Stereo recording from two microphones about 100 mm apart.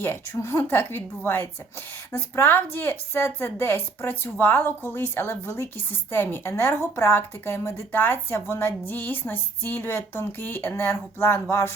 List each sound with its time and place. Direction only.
0.0 s a woman's voice: 25° left (ahead or behind)